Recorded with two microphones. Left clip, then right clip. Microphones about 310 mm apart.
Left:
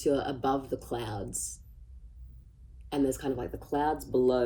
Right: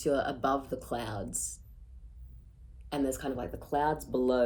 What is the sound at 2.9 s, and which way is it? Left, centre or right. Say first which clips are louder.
Speech: left 3 dB; centre.